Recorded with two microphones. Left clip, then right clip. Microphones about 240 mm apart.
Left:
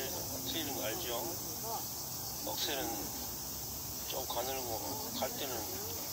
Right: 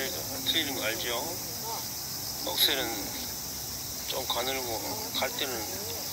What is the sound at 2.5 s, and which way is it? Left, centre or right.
Speech, right.